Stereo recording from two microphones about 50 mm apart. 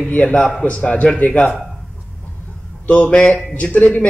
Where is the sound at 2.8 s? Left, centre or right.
Left.